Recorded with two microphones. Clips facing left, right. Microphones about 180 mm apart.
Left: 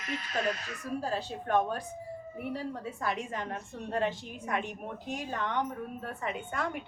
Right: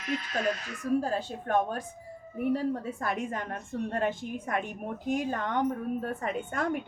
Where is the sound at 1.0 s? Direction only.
45° right (ahead or behind).